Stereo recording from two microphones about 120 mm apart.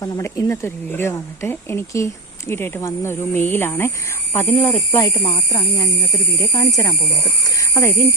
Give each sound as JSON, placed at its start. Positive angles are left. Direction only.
{"t": 0.0, "sound": "speech", "side_deg": 25}
{"t": 5.0, "sound": "speech", "side_deg": 25}